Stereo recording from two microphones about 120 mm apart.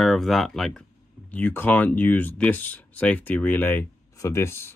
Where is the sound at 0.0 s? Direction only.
Centre (ahead or behind).